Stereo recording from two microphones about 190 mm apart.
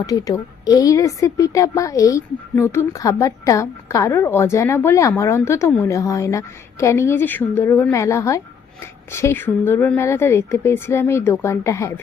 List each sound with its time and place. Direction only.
0.0 s a woman's voice: 20° left (ahead or behind)